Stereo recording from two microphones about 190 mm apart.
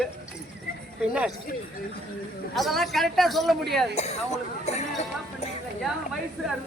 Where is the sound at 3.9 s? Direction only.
35° left (ahead or behind).